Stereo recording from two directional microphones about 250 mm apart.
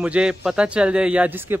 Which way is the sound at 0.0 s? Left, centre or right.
Centre.